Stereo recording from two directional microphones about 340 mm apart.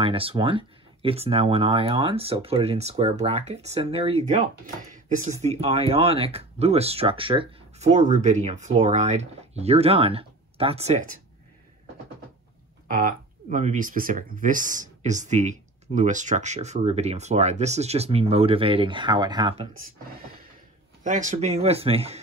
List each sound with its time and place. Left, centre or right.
0.0 s speech: centre
12.9 s speech: right
21.0 s speech: right